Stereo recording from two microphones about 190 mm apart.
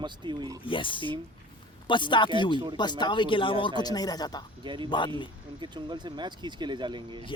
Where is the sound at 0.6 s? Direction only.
25° left (ahead or behind).